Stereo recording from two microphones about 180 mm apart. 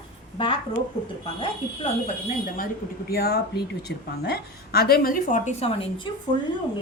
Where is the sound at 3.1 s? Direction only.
60° left (ahead or behind); by 5.7 s 45° left (ahead or behind).